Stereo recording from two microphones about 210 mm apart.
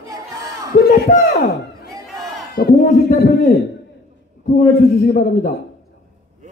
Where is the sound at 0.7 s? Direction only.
40° left (ahead or behind).